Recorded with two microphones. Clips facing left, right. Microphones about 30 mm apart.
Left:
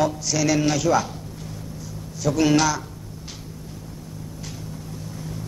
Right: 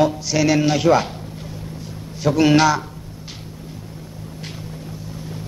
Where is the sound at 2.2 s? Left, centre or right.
Right.